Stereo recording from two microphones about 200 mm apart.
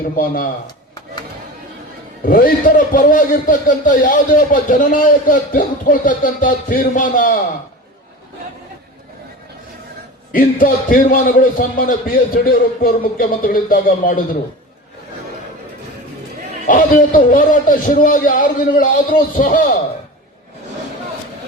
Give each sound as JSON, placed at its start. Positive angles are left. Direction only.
{"t": 0.2, "sound": "a man's voice", "side_deg": 45}
{"t": 2.2, "sound": "a man's voice", "side_deg": 45}
{"t": 10.3, "sound": "a man's voice", "side_deg": 45}
{"t": 16.6, "sound": "a man's voice", "side_deg": 40}